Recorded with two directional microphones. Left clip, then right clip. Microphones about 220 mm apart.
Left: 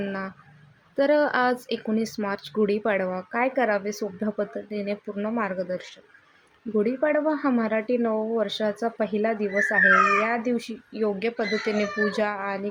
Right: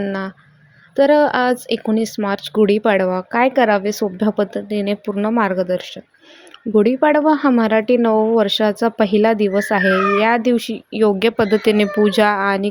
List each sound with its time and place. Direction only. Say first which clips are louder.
0.0 s speech: right 8 dB; 30° right (ahead or behind)